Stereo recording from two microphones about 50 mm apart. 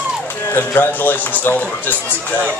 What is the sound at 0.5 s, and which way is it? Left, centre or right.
A man's voice, left.